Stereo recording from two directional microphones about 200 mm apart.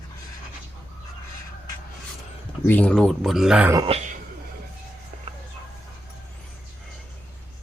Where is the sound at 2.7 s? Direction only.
5° left (ahead or behind).